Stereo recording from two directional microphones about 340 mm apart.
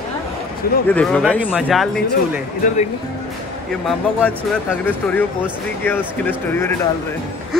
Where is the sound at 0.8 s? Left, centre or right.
Centre.